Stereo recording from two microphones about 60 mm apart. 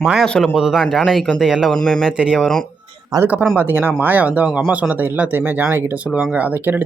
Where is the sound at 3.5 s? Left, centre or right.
Right.